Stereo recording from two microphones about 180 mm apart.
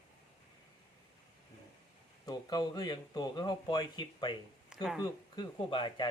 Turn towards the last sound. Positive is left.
turn(degrees=25)  # may be behind; listen again after turning